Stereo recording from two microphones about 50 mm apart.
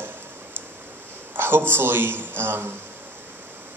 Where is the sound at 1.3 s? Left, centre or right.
Right.